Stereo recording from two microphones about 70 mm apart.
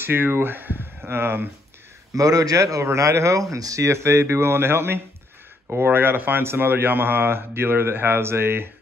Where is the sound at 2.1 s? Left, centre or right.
Right.